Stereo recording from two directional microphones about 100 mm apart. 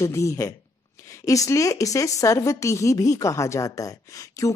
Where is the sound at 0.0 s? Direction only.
30° left (ahead or behind).